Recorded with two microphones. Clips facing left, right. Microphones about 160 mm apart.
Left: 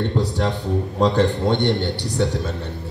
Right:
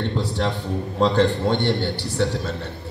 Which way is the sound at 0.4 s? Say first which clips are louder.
Left 2 dB; 15° left (ahead or behind).